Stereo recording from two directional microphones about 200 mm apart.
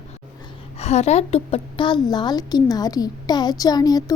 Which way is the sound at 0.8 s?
35° left (ahead or behind).